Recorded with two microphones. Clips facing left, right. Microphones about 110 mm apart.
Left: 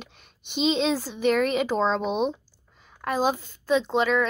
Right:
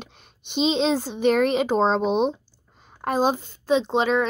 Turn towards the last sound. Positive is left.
turn(degrees=-25)  # may be behind; listen again after turning